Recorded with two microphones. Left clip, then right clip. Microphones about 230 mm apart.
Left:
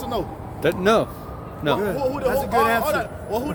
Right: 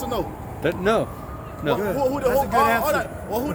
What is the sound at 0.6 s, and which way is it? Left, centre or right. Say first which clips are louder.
Speech: left 3 dB; left.